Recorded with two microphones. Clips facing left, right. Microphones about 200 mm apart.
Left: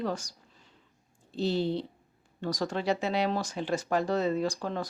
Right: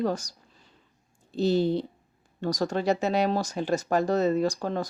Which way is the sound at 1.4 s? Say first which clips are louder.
Right 5 dB; 45° right (ahead or behind).